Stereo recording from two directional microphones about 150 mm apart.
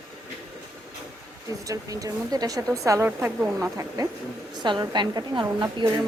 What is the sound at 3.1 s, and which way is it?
Speech, 5° right (ahead or behind).